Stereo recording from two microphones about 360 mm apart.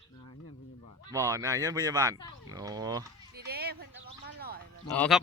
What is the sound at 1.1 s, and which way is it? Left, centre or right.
Speech, centre.